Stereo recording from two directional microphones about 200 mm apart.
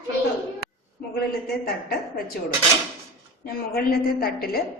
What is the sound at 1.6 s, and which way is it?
Speech, 50° left (ahead or behind).